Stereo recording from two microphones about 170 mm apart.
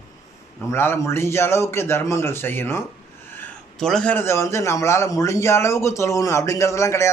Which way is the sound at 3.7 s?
5° left (ahead or behind).